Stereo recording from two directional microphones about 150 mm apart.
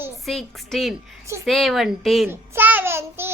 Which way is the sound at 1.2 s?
20° right (ahead or behind).